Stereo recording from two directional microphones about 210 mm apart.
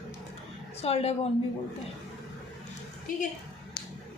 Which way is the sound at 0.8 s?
30° left (ahead or behind).